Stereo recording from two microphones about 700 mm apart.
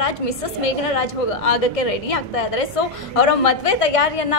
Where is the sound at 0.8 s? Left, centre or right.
Left.